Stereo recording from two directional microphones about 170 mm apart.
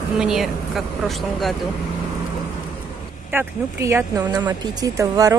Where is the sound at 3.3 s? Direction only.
15° right (ahead or behind).